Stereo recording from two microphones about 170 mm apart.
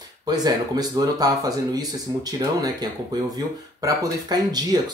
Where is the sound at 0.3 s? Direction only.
20° right (ahead or behind).